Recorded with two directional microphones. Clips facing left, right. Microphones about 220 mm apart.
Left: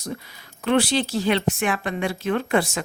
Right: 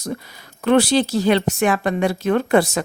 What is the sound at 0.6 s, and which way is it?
A woman's voice, 45° right (ahead or behind).